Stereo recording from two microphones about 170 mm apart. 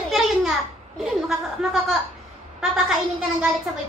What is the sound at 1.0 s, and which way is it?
Chuckle, centre (ahead or behind).